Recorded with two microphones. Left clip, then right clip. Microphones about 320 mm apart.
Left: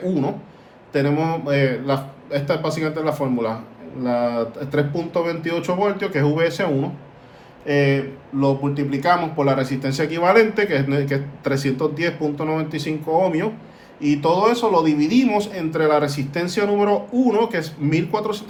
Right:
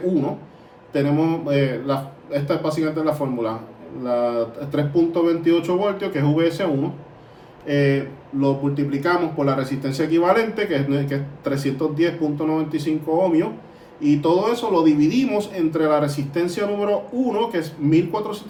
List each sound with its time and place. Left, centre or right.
0.9 s a man's voice: left
7.7 s a man's voice: left